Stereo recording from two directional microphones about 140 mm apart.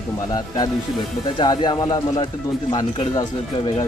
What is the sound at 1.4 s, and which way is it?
Speech, 30° left (ahead or behind).